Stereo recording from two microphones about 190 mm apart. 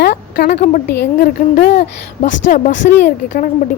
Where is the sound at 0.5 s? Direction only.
35° left (ahead or behind).